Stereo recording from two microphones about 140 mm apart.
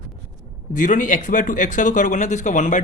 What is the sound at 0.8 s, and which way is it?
Speech, 70° left (ahead or behind).